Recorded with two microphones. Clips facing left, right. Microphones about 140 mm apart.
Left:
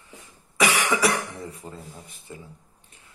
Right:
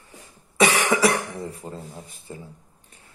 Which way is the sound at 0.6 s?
25° right (ahead or behind).